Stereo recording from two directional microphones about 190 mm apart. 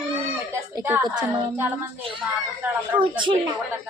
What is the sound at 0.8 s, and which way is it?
Speech, 15° right (ahead or behind).